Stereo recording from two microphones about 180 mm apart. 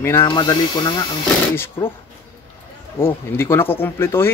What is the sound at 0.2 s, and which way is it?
Speech, 25° left (ahead or behind).